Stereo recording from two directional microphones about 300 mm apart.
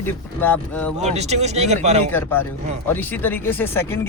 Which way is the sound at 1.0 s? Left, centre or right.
Right.